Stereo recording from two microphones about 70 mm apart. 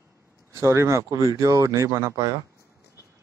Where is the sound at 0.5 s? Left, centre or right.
Right.